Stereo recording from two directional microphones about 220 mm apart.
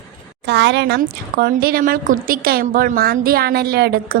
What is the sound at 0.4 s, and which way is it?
A woman's voice, 50° right (ahead or behind).